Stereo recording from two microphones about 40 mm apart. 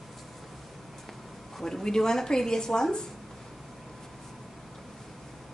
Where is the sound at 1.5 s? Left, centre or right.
Centre.